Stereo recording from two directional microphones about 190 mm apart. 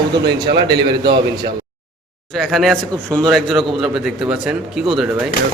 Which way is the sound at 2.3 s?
Centre (ahead or behind).